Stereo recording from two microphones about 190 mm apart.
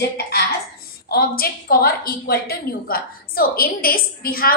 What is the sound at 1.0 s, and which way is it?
A woman's voice, 55° left (ahead or behind).